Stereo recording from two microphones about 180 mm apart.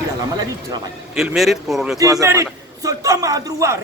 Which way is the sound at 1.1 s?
Centre (ahead or behind).